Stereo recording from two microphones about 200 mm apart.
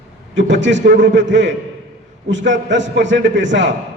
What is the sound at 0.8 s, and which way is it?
Speech, 40° right (ahead or behind).